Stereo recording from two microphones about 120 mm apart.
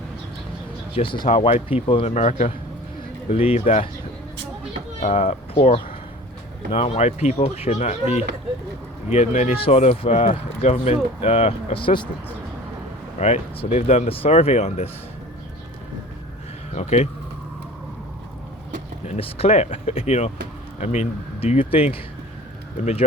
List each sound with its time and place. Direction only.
0.9 s speech: 45° left (ahead or behind)
1.9 s speech: 55° left (ahead or behind)
4.9 s speech: 65° left (ahead or behind)
9.0 s speech: 70° left (ahead or behind)
9.6 s speech: 55° left (ahead or behind)
13.1 s speech: 65° left (ahead or behind)
16.7 s speech: 65° left (ahead or behind)
19.0 s speech: 60° left (ahead or behind)
20.8 s speech: 70° left (ahead or behind); by 22.0 s 50° left (ahead or behind)
22.8 s speech: 65° left (ahead or behind)